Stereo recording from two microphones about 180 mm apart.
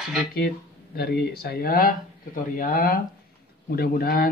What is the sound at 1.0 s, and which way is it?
Speech, 55° left (ahead or behind).